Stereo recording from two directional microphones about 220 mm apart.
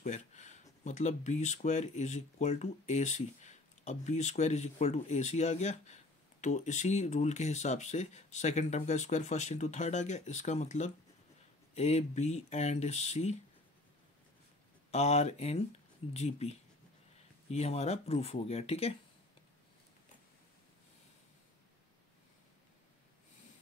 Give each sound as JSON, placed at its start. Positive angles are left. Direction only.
{"t": 0.0, "sound": "speech", "side_deg": 30}
{"t": 14.9, "sound": "speech", "side_deg": 30}